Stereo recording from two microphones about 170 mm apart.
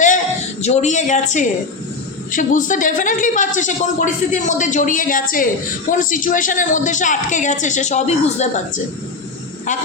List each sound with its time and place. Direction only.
0.6 s a woman's voice: 40° left (ahead or behind)